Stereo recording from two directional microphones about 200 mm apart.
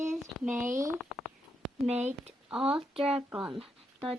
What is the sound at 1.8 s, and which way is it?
Speech, 35° right (ahead or behind).